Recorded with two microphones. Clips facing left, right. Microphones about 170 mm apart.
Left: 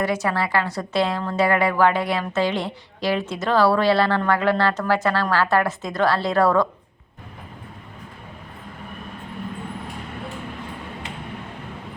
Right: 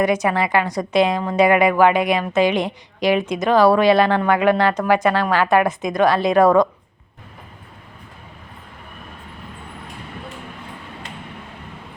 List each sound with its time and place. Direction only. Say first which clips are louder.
0.0 s a woman's voice: right 4 dB; 15° right (ahead or behind)